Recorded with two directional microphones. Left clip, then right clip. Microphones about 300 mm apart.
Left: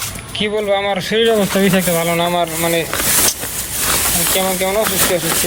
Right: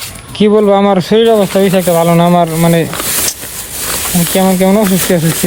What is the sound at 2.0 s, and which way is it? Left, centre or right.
Speech, right.